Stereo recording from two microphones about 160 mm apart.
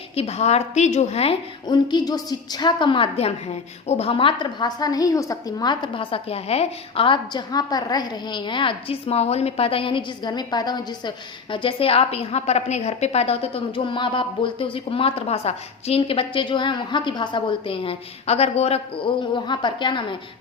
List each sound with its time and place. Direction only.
0.2 s a woman's voice: 40° left (ahead or behind)
1.6 s a woman's voice: 25° left (ahead or behind)